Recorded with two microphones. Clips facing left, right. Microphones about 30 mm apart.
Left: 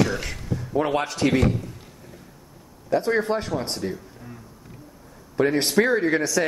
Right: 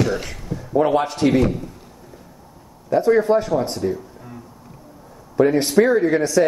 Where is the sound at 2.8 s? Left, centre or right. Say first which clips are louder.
Right 6 dB; centre.